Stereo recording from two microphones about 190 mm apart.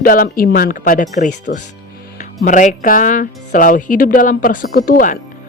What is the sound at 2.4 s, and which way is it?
Speech, 40° left (ahead or behind).